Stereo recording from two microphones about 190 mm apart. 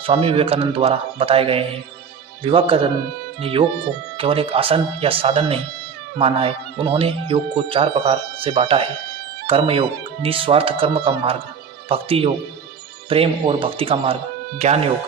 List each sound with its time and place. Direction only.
0.0 s speech: 30° right (ahead or behind)